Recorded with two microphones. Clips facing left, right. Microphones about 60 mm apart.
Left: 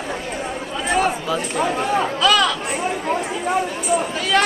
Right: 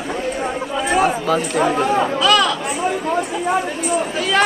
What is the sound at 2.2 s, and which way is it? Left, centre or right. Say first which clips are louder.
Speech: even; centre.